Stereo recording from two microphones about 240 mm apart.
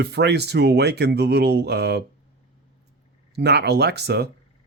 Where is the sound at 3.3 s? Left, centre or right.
Right.